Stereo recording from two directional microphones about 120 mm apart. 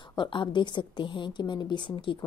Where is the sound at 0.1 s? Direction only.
40° left (ahead or behind).